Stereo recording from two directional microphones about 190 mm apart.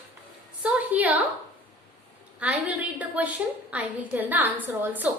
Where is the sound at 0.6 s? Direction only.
10° right (ahead or behind).